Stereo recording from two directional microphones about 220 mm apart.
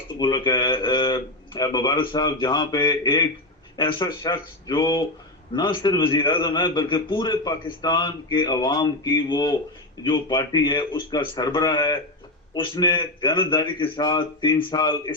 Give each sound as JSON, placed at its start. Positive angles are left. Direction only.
{"t": 0.2, "sound": "a man's voice", "side_deg": 20}